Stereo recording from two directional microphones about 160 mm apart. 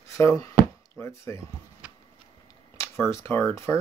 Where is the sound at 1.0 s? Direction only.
15° left (ahead or behind).